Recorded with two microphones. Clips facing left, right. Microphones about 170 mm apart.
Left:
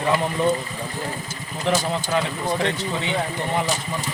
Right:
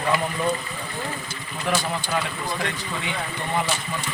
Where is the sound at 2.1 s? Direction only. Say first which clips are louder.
Left 6 dB; 20° left (ahead or behind).